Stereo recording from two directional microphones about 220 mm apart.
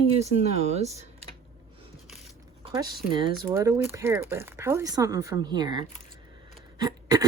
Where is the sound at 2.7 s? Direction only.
20° right (ahead or behind).